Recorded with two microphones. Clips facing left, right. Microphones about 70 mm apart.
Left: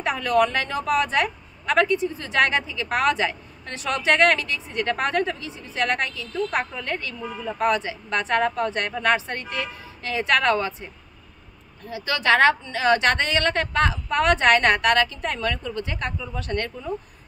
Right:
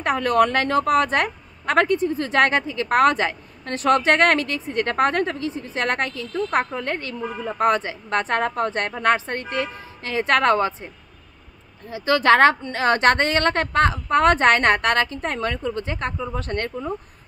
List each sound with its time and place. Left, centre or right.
0.0 s a woman's voice: right
11.9 s a woman's voice: right